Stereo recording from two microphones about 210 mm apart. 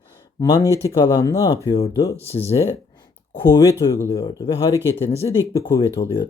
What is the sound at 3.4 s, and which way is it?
Speech, 15° left (ahead or behind).